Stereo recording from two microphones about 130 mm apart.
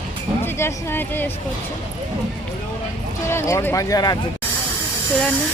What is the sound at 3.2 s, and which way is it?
Speech, 20° left (ahead or behind).